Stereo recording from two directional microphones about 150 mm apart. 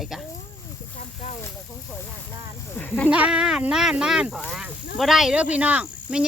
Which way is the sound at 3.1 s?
5° right (ahead or behind).